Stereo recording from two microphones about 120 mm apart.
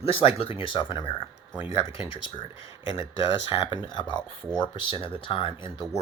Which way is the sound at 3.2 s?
45° left (ahead or behind).